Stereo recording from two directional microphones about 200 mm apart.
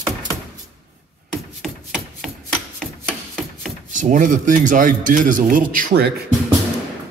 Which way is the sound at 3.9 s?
40° right (ahead or behind).